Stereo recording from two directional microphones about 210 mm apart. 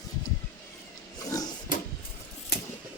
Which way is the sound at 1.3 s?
15° left (ahead or behind).